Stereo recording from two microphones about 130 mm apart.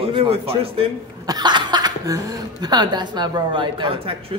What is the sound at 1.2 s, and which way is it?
A man's voice, 35° right (ahead or behind).